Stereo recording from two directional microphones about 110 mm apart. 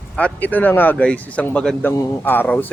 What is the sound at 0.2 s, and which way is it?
Speech, 15° left (ahead or behind).